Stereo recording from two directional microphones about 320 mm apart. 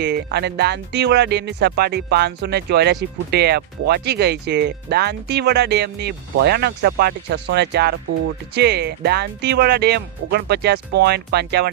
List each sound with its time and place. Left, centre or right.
0.0 s speech: right